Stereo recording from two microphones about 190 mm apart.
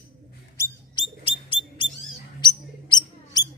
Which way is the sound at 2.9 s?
20° left (ahead or behind).